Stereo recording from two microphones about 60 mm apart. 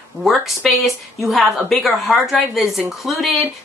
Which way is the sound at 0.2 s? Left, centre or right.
Centre.